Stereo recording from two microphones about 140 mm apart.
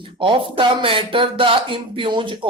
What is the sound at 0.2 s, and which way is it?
Speech, 40° right (ahead or behind).